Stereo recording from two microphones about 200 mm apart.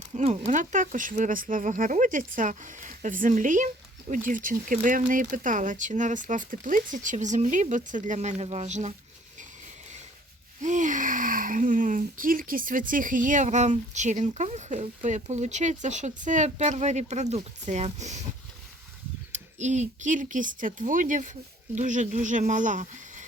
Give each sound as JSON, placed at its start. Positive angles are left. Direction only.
{"t": 0.1, "sound": "speech", "side_deg": -30}
{"t": 10.6, "sound": "speech", "side_deg": -40}
{"t": 19.3, "sound": "speech", "side_deg": -35}